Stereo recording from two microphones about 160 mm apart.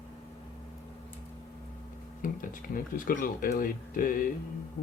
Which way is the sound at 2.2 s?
60° left (ahead or behind).